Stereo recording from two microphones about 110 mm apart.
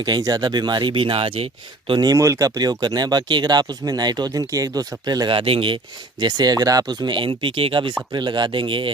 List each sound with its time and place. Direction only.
0.0 s speech: 35° right (ahead or behind); by 1.5 s 55° right (ahead or behind)
1.9 s speech: 40° right (ahead or behind)